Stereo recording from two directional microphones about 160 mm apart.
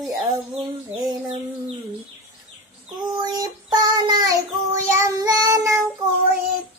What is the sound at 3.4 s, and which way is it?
Child singing, 25° right (ahead or behind).